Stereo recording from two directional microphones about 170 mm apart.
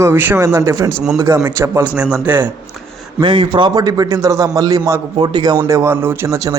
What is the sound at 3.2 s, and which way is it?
A man's voice, 30° right (ahead or behind).